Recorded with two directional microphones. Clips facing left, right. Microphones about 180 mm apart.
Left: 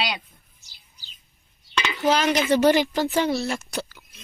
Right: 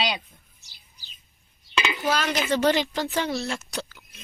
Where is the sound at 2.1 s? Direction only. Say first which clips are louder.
Left 6 dB; 15° left (ahead or behind).